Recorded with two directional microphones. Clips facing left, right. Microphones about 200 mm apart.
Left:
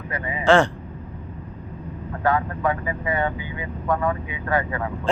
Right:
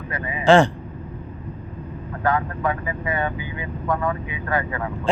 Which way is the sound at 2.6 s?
20° left (ahead or behind).